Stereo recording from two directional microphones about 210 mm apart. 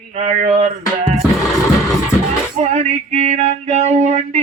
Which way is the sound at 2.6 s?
30° right (ahead or behind).